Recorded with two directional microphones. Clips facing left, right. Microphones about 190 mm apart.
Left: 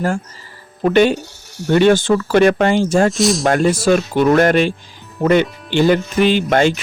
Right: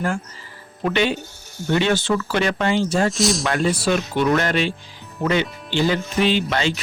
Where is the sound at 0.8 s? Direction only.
45° left (ahead or behind).